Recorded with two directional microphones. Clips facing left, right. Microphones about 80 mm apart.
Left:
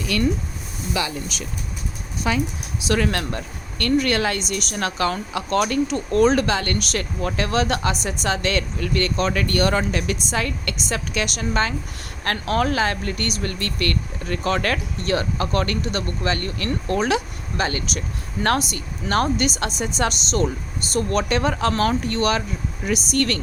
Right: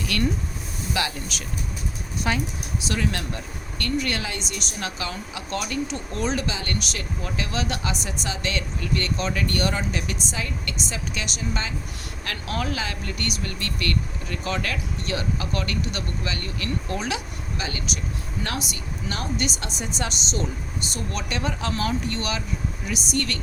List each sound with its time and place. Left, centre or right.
2.8 s speech: left
12.2 s speech: left